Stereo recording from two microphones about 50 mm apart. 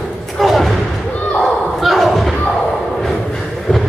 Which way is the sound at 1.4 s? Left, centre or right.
Centre.